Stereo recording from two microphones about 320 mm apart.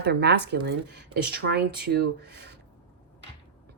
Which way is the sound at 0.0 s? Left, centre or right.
Right.